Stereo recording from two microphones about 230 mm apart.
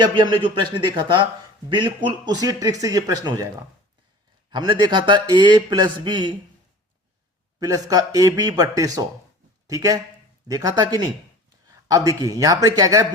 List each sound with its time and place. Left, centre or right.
0.0 s a man's voice: centre
7.6 s speech: centre